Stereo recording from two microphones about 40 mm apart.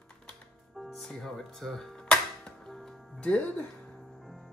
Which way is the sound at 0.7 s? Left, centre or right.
Centre.